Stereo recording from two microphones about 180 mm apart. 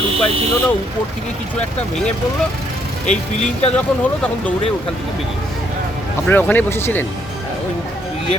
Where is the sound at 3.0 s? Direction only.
40° left (ahead or behind).